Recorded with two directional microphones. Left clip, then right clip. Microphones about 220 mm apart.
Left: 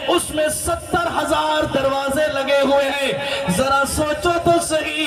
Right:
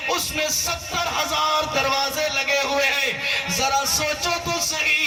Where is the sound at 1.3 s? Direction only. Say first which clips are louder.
Left 2 dB; 50° left (ahead or behind).